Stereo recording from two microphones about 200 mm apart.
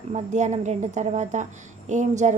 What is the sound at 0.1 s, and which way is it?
A woman's voice, 35° right (ahead or behind).